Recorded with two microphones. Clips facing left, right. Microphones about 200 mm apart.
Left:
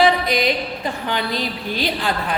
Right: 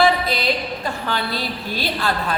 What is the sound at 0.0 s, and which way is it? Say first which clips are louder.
A woman's voice: left 1 dB; 15° left (ahead or behind).